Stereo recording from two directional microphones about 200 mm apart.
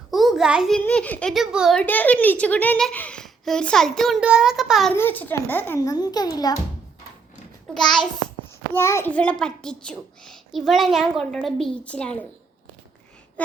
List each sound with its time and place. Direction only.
0.1 s a child's voice: centre (ahead or behind)
1.8 s a child's voice: 10° left (ahead or behind)
7.7 s a child's voice: centre (ahead or behind)
8.7 s a child's voice: 15° left (ahead or behind)